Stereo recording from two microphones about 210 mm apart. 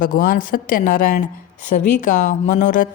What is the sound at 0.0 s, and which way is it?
A woman's voice, 45° left (ahead or behind).